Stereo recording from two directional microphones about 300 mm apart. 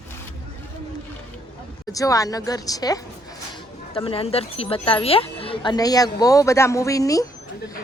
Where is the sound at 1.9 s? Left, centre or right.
Centre.